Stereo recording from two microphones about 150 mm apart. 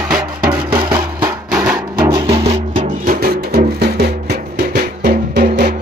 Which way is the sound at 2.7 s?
65° right (ahead or behind).